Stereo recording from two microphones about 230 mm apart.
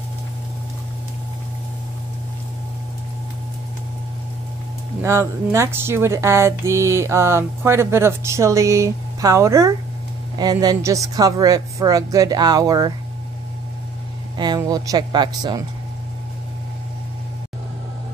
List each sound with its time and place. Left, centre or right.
5.0 s speech: centre
14.3 s speech: centre